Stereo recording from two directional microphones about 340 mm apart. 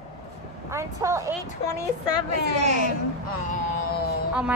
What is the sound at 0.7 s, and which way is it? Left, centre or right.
Speech, centre.